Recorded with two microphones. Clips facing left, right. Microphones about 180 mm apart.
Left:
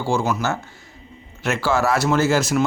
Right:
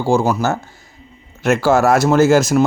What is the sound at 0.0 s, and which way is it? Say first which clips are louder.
Speech: right 6 dB; 40° right (ahead or behind).